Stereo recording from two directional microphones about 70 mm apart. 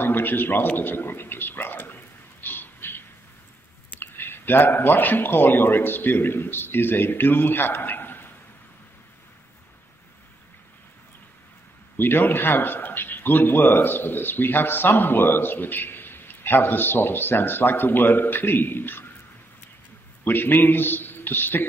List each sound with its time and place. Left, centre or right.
0.0 s a man's voice: left
2.4 s a sound: left
4.0 s speech: left
12.0 s a man's voice: left
20.2 s a man's voice: left